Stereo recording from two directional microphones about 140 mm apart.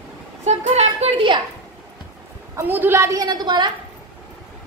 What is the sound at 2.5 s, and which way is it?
A woman's voice, 15° right (ahead or behind).